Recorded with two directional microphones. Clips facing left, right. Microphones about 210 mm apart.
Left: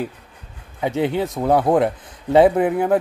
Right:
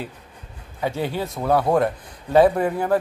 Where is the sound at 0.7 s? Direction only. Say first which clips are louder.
Left 4 dB; 20° left (ahead or behind).